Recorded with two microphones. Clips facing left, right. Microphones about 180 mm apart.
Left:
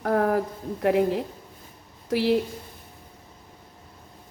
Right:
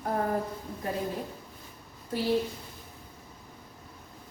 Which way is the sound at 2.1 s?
90° left.